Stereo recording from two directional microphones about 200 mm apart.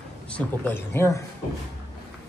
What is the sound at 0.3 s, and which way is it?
Speech, 10° left (ahead or behind).